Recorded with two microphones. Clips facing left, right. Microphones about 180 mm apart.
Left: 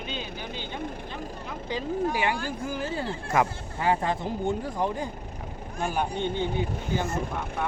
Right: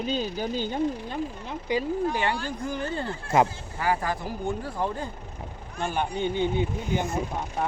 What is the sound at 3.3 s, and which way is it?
Speech, 25° right (ahead or behind).